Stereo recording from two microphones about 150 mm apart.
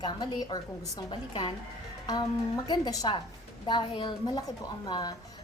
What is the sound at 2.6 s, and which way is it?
A woman's voice, 25° left (ahead or behind).